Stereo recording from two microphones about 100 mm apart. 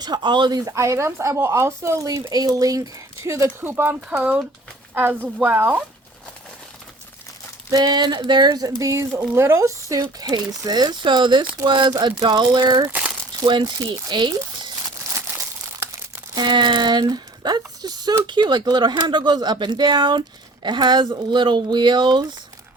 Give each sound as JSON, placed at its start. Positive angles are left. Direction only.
{"t": 0.0, "sound": "speech", "side_deg": -50}
{"t": 0.6, "sound": "speech", "side_deg": -30}
{"t": 7.7, "sound": "speech", "side_deg": -45}
{"t": 16.3, "sound": "speech", "side_deg": -50}